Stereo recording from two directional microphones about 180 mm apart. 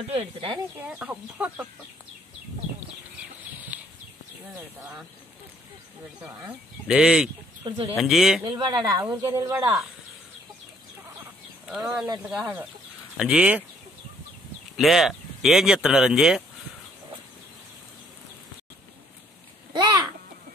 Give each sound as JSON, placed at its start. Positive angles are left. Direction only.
{"t": 0.1, "sound": "speech", "side_deg": -30}
{"t": 0.7, "sound": "speech", "side_deg": -5}
{"t": 3.7, "sound": "a sound", "side_deg": -10}
{"t": 4.6, "sound": "speech", "side_deg": -5}
{"t": 6.2, "sound": "speech", "side_deg": -5}
{"t": 7.6, "sound": "speech", "side_deg": -25}
{"t": 8.0, "sound": "speech", "side_deg": 0}
{"t": 8.5, "sound": "speech", "side_deg": -25}
{"t": 9.0, "sound": "speech", "side_deg": -15}
{"t": 11.6, "sound": "speech", "side_deg": -5}
{"t": 14.8, "sound": "speech", "side_deg": 0}
{"t": 19.7, "sound": "a sound", "side_deg": -20}